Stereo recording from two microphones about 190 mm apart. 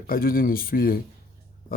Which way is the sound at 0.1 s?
50° left (ahead or behind).